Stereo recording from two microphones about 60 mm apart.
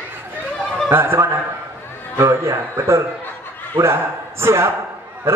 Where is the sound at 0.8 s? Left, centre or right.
Right.